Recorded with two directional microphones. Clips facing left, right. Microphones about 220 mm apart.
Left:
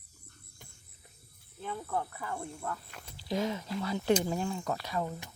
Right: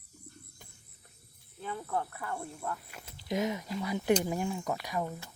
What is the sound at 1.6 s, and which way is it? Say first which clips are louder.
Speech: even; centre (ahead or behind).